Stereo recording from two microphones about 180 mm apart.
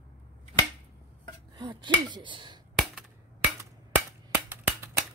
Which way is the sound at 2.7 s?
Centre (ahead or behind).